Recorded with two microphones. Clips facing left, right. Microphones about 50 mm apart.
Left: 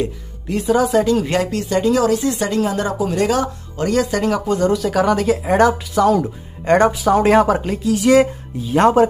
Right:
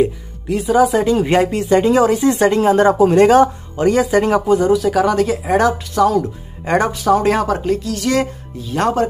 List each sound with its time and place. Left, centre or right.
0.5 s speech: centre; by 3.4 s right
3.7 s speech: centre
4.5 s speech: centre